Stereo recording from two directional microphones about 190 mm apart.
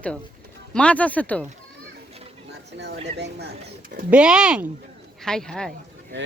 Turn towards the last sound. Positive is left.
turn(degrees=5)  # may be behind; listen again after turning